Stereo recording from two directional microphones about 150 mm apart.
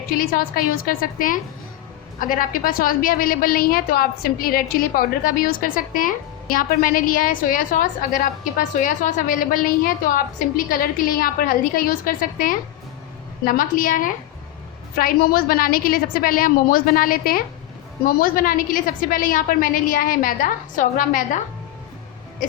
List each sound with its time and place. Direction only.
0.2 s a woman's voice: 70° left (ahead or behind)
14.9 s a woman's voice: 75° left (ahead or behind)